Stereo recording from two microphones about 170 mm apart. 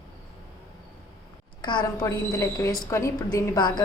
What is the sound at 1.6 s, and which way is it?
A woman's voice, 25° left (ahead or behind).